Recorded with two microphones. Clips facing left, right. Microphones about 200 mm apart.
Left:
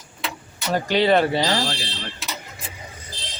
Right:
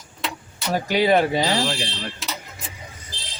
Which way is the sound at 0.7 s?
10° right (ahead or behind).